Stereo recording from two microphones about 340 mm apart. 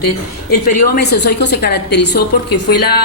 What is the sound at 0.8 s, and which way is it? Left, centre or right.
A woman's voice, left.